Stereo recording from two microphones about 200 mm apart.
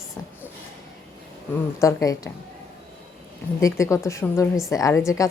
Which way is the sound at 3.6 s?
15° left (ahead or behind).